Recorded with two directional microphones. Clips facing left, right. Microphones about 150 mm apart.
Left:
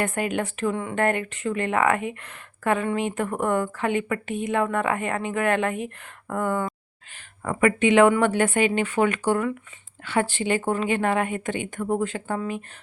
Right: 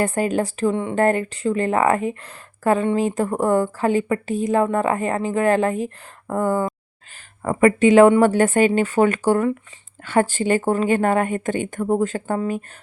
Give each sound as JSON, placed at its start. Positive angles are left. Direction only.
{"t": 0.0, "sound": "speech", "side_deg": -35}
{"t": 0.9, "sound": "a woman's voice", "side_deg": -35}